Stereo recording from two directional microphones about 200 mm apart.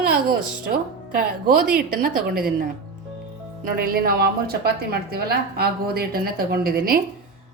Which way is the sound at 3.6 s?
45° right (ahead or behind).